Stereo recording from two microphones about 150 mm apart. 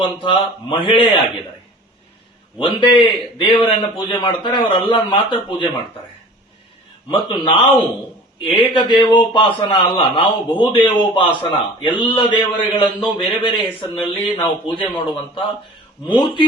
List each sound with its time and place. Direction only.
0.0 s a man's voice: 35° left (ahead or behind)
2.6 s a man's voice: 35° left (ahead or behind)
7.1 s a man's voice: 30° left (ahead or behind)